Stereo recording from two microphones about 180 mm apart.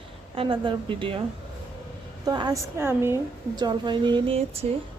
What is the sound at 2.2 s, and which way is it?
A woman's voice, 20° right (ahead or behind).